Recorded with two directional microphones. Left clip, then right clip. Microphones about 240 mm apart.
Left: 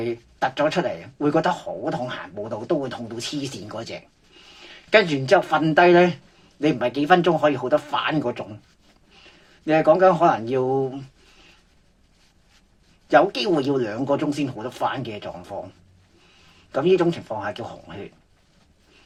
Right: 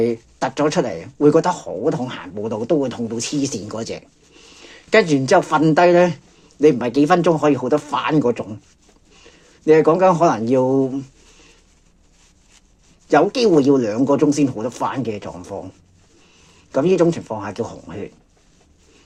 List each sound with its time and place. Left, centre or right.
0.0 s speech: right
9.6 s speech: right
13.1 s speech: right
16.7 s speech: right